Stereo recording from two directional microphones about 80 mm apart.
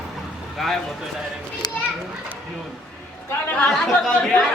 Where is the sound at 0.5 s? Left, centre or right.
Centre.